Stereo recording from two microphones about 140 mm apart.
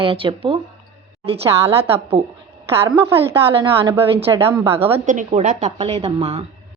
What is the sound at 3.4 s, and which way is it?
Speech, 40° right (ahead or behind).